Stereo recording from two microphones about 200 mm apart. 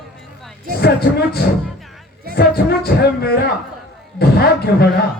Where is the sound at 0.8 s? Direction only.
55° left (ahead or behind).